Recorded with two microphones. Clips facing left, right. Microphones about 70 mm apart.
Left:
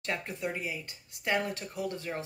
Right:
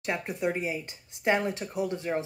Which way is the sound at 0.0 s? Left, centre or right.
Centre.